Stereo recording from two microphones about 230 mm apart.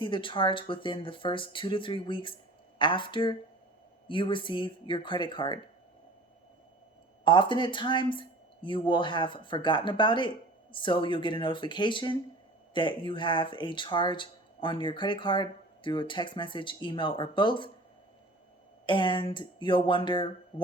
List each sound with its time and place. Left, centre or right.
0.0 s speech: left
7.3 s speech: left
18.9 s speech: left